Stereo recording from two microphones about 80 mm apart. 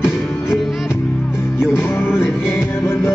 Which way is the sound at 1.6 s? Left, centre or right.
Left.